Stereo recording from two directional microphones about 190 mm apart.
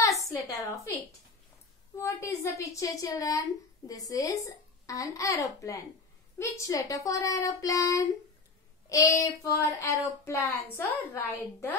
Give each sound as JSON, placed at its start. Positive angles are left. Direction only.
{"t": 0.2, "sound": "a woman's voice", "side_deg": 15}